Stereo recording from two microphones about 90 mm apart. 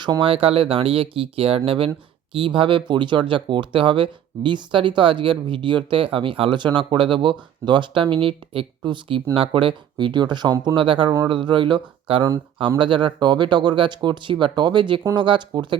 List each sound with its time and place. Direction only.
0.0 s speech: 65° right (ahead or behind); by 1.9 s 90° right
2.3 s speech: 70° right (ahead or behind)
9.3 s speech: 75° right (ahead or behind); by 10.7 s 55° right (ahead or behind)
10.8 s speech: 65° right (ahead or behind)